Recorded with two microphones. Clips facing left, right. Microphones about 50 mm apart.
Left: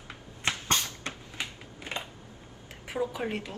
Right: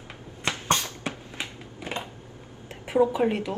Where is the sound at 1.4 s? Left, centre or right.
Centre.